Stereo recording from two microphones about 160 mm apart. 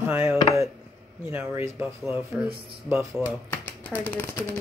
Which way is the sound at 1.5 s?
15° right (ahead or behind).